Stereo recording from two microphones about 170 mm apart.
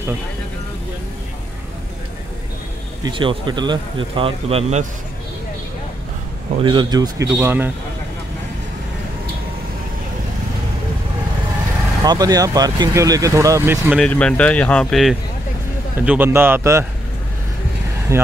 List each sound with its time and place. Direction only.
3.0 s speech: 30° right (ahead or behind)
6.6 s speech: 30° right (ahead or behind); by 7.7 s 10° right (ahead or behind)
12.0 s speech: 20° right (ahead or behind)
13.9 s speech: 5° left (ahead or behind)
16.1 s speech: 10° right (ahead or behind)
18.1 s speech: 20° right (ahead or behind)